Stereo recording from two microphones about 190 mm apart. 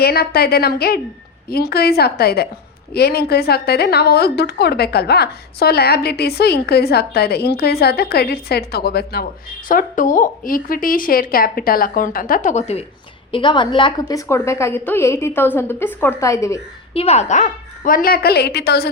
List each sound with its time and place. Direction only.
0.0 s a woman's voice: 55° left (ahead or behind)
9.6 s a woman's voice: 45° left (ahead or behind)
13.3 s a woman's voice: 25° left (ahead or behind)
16.9 s a woman's voice: 30° left (ahead or behind); by 18.9 s 60° left (ahead or behind)